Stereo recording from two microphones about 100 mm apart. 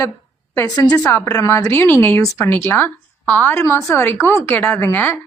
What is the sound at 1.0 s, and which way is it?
A woman's voice, 25° left (ahead or behind).